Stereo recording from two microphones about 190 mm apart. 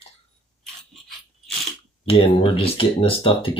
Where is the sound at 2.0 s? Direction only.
30° left (ahead or behind).